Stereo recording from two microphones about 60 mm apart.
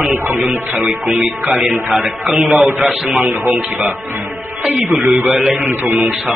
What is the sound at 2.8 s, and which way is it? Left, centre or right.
Speech, right.